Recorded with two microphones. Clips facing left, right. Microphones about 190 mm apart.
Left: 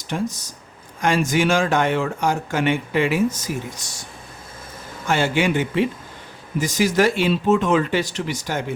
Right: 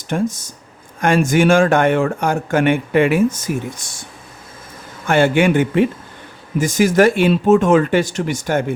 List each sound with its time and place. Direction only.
0.1 s speech: 55° right (ahead or behind)
5.0 s a man's voice: 55° right (ahead or behind)